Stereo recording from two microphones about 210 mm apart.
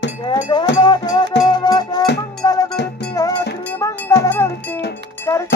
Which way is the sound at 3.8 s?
15° left (ahead or behind).